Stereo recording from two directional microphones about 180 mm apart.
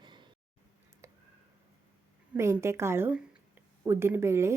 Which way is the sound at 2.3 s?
15° right (ahead or behind).